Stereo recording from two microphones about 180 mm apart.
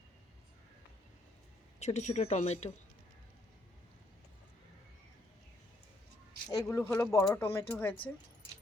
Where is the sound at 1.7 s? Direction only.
40° left (ahead or behind).